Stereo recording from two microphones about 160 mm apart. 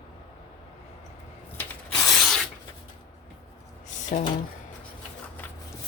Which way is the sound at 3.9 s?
50° left (ahead or behind).